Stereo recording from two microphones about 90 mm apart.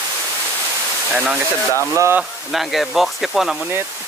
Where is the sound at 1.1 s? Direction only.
5° right (ahead or behind).